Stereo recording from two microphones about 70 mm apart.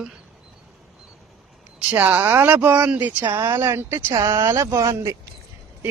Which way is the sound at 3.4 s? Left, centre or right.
Right.